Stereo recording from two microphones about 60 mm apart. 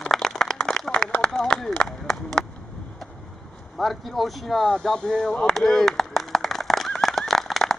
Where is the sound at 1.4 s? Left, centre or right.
Centre.